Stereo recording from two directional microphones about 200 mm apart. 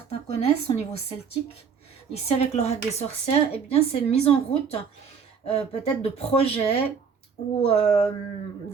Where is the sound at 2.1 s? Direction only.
30° left (ahead or behind).